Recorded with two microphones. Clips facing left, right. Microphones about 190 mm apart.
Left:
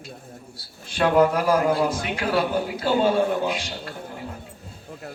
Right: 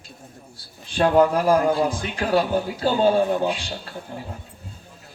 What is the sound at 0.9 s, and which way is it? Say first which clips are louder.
A man's voice: right 1 dB; 35° right (ahead or behind).